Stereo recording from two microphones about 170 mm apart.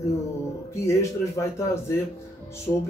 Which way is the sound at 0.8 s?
15° left (ahead or behind).